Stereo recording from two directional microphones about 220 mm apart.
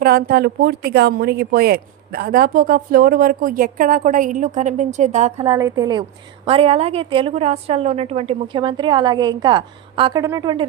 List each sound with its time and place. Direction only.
0.0 s a woman's voice: 45° right (ahead or behind); by 5.5 s 30° right (ahead or behind)
5.5 s a woman's voice: 15° right (ahead or behind)